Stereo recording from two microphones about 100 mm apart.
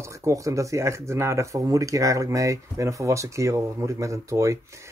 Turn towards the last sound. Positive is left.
turn(degrees=-30)  # may be behind; listen again after turning